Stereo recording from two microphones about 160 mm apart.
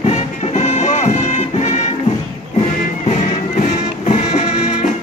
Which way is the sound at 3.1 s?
40° left (ahead or behind).